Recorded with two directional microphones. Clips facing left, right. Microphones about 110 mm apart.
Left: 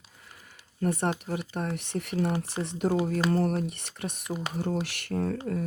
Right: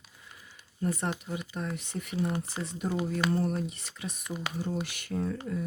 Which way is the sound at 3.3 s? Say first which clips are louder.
Left 3 dB; 70° left (ahead or behind).